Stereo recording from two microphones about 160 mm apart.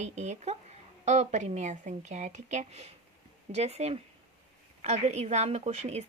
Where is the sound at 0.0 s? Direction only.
45° right (ahead or behind).